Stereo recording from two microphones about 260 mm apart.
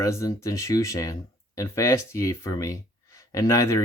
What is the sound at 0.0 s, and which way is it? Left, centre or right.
Speech, centre.